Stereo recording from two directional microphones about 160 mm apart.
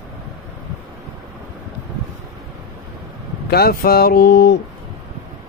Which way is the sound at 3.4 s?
75° left (ahead or behind).